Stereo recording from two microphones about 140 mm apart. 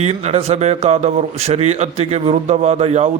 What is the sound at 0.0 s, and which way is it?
A man's voice, 50° right (ahead or behind).